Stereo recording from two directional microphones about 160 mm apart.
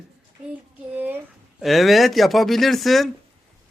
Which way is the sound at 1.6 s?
Centre (ahead or behind).